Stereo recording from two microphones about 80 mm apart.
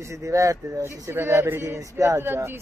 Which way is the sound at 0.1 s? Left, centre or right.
Right.